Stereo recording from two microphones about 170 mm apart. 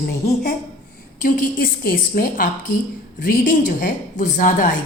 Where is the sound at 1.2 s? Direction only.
55° left (ahead or behind).